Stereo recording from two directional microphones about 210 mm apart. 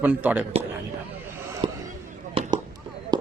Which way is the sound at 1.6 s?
25° right (ahead or behind).